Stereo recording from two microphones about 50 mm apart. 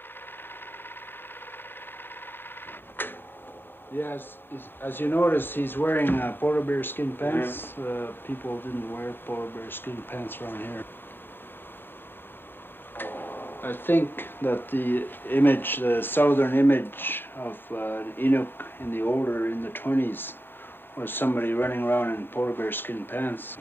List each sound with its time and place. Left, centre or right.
3.0 s a sound: left
3.9 s speech: left
12.9 s speech: left